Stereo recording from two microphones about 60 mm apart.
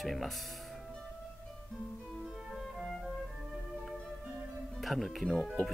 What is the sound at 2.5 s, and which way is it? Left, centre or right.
Music, centre.